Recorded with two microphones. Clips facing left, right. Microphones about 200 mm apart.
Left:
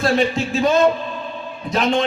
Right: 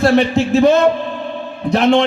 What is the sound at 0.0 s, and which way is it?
A man's voice, 65° right (ahead or behind).